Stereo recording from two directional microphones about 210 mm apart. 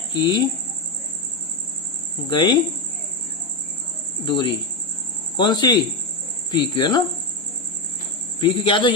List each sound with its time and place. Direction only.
0.1 s speech: 20° left (ahead or behind)
2.3 s speech: 20° left (ahead or behind)
4.3 s speech: 25° left (ahead or behind)
8.4 s speech: 25° left (ahead or behind)